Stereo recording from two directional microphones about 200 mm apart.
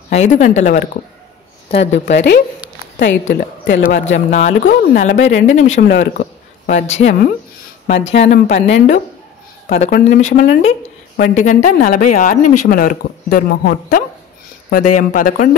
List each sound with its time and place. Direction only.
0.1 s speech: 35° left (ahead or behind)
1.8 s a man's voice: 60° left (ahead or behind)
4.3 s speech: 35° left (ahead or behind)
5.9 s speech: 50° left (ahead or behind)